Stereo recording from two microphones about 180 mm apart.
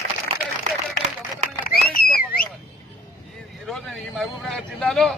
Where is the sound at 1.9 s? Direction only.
55° left (ahead or behind).